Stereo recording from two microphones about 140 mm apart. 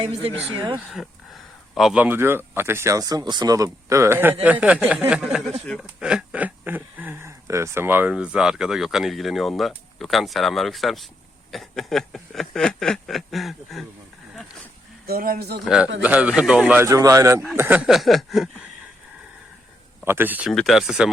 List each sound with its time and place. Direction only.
0.0 s speech: 40° right (ahead or behind)
0.9 s speech: centre (ahead or behind)
15.0 s speech: 90° right
15.6 s speech: 5° right (ahead or behind); by 17.4 s 20° right (ahead or behind)
17.6 s speech: 10° right (ahead or behind)
20.1 s speech: 15° right (ahead or behind)
20.5 s speech: centre (ahead or behind)